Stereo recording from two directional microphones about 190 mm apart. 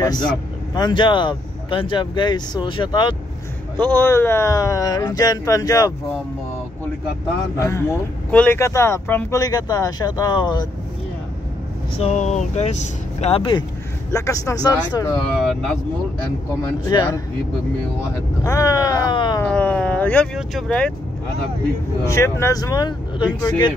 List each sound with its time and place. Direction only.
0.7 s speech: 25° left (ahead or behind)
3.8 s speech: 10° left (ahead or behind)
7.5 s speech: 15° left (ahead or behind)
12.0 s speech: 35° left (ahead or behind); by 15.0 s 20° left (ahead or behind)
15.4 s speech: centre (ahead or behind)
16.8 s speech: 20° left (ahead or behind)
18.4 s speech: 20° left (ahead or behind)
19.4 s speech: 5° left (ahead or behind)
22.0 s speech: 15° left (ahead or behind)